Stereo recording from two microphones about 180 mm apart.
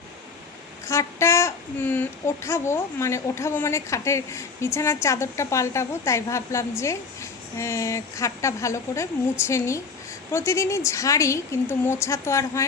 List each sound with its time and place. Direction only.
0.9 s speech: 15° left (ahead or behind)